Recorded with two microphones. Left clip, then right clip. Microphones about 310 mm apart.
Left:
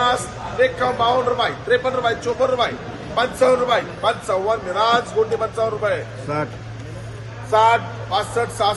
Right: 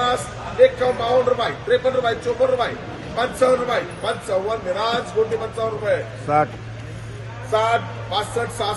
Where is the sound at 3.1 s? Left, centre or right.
Centre.